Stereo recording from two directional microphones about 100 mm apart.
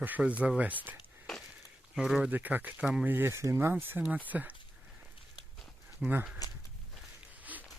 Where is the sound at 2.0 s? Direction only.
5° right (ahead or behind).